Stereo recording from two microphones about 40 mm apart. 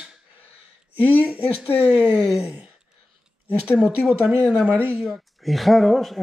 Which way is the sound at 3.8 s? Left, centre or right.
Right.